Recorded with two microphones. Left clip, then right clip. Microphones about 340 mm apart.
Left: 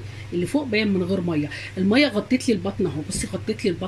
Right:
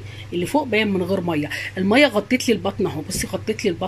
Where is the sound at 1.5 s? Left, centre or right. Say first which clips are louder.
Right 5 dB; centre.